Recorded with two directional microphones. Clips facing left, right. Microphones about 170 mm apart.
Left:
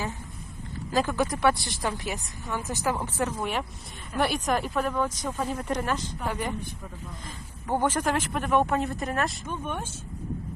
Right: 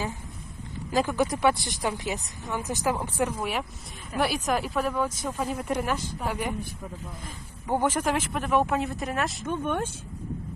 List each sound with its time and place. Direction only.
0.9 s speech: 15° right (ahead or behind)
7.7 s speech: 10° right (ahead or behind)